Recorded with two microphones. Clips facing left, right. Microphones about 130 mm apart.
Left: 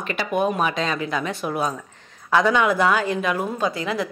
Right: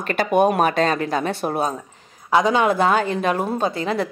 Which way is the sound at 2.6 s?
30° right (ahead or behind).